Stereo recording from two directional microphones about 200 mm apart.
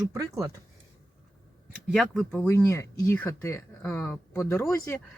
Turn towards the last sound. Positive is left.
turn(degrees=10)  # may be behind; listen again after turning